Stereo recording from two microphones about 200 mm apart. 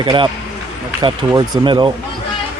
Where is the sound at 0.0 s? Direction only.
25° right (ahead or behind).